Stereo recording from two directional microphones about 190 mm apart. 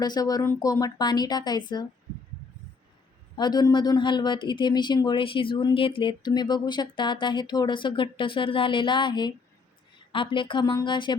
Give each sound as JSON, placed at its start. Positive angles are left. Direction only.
{"t": 0.0, "sound": "speech", "side_deg": 20}
{"t": 3.3, "sound": "speech", "side_deg": 20}